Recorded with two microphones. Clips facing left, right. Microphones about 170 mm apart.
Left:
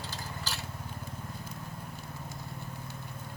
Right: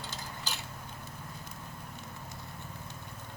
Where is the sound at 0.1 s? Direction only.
20° right (ahead or behind).